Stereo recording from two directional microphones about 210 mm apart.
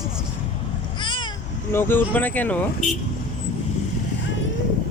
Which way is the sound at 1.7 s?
10° left (ahead or behind).